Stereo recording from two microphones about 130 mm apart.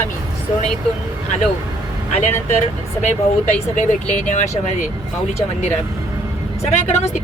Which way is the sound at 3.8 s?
65° left (ahead or behind).